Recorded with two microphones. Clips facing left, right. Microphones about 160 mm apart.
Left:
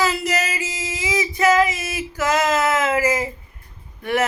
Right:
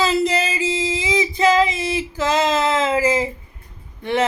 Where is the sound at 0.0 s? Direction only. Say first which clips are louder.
Right 3 dB; 25° right (ahead or behind).